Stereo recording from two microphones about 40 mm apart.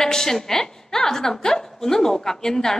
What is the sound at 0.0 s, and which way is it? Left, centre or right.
A woman's voice, centre.